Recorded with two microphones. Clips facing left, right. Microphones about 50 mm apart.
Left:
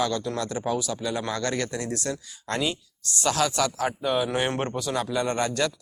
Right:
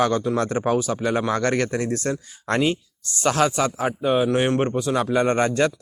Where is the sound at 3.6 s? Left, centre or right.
Right.